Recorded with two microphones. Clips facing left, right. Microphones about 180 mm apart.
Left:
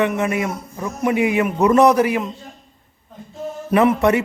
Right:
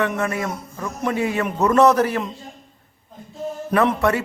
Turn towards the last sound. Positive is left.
turn(degrees=20)  # may be behind; listen again after turning